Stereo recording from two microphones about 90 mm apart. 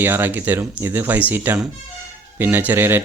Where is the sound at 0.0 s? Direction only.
20° right (ahead or behind).